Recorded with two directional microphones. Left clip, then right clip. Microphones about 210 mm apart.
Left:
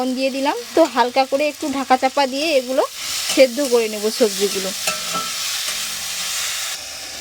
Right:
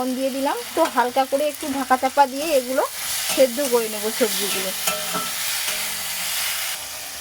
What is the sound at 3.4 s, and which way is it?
Sizzle, 45° left (ahead or behind).